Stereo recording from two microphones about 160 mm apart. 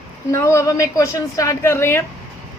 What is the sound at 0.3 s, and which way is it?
A woman's voice, 20° left (ahead or behind).